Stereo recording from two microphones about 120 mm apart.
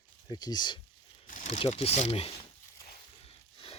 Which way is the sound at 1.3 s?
85° left.